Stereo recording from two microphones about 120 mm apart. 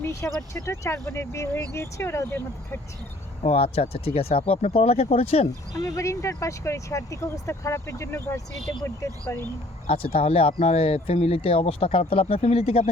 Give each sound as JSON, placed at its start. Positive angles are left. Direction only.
{"t": 0.0, "sound": "speech", "side_deg": 25}
{"t": 3.4, "sound": "speech", "side_deg": 55}
{"t": 5.8, "sound": "speech", "side_deg": 25}
{"t": 9.8, "sound": "speech", "side_deg": 55}